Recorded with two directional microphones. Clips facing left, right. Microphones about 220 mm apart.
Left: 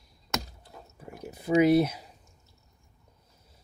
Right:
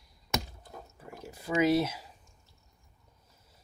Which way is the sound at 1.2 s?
20° left (ahead or behind).